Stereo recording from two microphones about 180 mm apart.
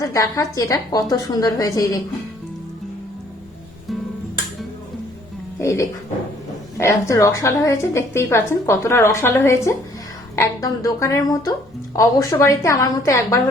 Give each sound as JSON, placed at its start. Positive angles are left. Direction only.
{"t": 0.0, "sound": "a woman's voice", "side_deg": 20}
{"t": 5.5, "sound": "a sound", "side_deg": 15}
{"t": 6.7, "sound": "a woman's voice", "side_deg": 15}